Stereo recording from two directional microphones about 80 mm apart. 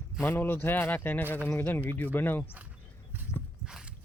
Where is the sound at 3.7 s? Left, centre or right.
Centre.